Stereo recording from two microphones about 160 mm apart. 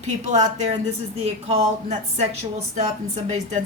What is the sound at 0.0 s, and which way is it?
Speech, 45° right (ahead or behind).